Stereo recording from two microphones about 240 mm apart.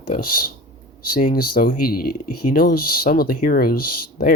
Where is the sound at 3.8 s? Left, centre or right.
Left.